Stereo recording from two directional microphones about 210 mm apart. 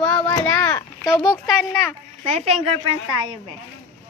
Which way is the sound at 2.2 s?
30° right (ahead or behind).